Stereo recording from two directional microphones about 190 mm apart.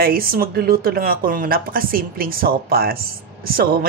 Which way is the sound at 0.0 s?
50° right (ahead or behind).